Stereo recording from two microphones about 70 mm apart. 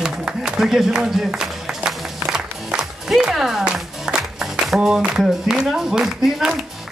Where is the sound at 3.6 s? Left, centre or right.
Centre.